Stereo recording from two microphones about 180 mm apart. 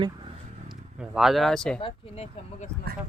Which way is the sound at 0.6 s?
Centre (ahead or behind).